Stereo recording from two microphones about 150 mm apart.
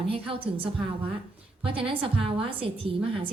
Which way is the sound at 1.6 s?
35° right (ahead or behind).